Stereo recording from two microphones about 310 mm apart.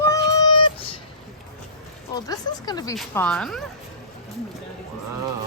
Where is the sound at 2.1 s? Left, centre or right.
Centre.